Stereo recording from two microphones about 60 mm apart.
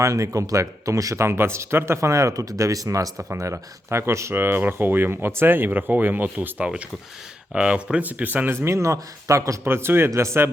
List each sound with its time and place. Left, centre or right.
0.0 s speech: right
1.2 s speech: right
3.2 s speech: right
4.4 s speech: right
7.5 s speech: centre
8.0 s speech: right
8.6 s speech: right
9.6 s speech: right